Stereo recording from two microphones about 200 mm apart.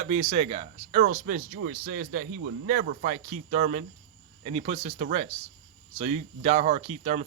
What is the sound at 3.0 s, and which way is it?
Speech, 35° right (ahead or behind).